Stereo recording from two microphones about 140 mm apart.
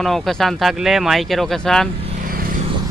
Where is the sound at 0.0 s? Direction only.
Centre (ahead or behind).